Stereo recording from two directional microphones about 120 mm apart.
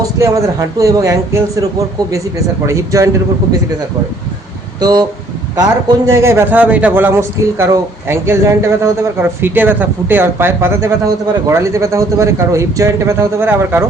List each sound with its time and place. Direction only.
0.0 s speech: 30° right (ahead or behind)
2.6 s speech: 25° right (ahead or behind)
4.8 s speech: 35° right (ahead or behind)
6.1 s speech: 25° right (ahead or behind)